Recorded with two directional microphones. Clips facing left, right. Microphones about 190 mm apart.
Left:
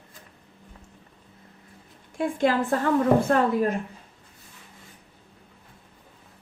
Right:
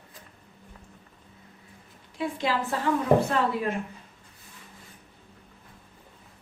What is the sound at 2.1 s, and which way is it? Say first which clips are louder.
A woman's voice: left 5 dB; 50° left (ahead or behind).